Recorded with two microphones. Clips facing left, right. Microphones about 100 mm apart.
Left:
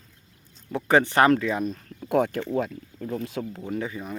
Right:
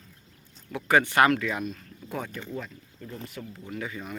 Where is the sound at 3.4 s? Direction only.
55° left (ahead or behind).